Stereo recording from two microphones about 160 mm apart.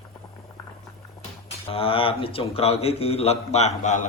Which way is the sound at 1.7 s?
35° left (ahead or behind).